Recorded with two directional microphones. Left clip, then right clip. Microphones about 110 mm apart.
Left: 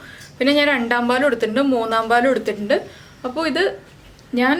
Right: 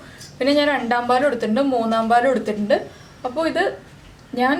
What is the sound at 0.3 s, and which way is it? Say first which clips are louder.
A woman's voice: left 1 dB; 20° left (ahead or behind).